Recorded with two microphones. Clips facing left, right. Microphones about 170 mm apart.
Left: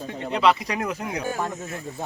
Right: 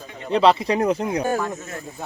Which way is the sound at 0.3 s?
30° right (ahead or behind).